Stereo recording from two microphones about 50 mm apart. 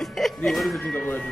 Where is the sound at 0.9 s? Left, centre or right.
Left.